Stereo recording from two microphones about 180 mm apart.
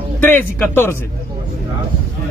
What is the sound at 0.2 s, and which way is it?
Speech, 10° left (ahead or behind).